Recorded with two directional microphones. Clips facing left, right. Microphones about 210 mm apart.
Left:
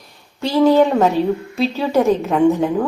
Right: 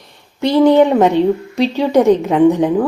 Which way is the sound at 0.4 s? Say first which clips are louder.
Right 3 dB; 20° right (ahead or behind).